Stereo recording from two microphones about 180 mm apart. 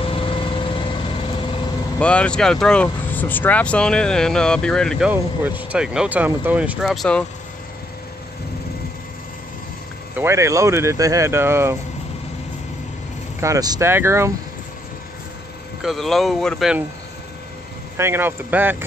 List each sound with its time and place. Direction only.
0.0 s vehicle: 30° left (ahead or behind)
2.0 s speech: 5° left (ahead or behind)
10.1 s speech: 15° right (ahead or behind)
13.4 s speech: 20° right (ahead or behind)
15.8 s speech: centre (ahead or behind)
17.9 s speech: 15° right (ahead or behind)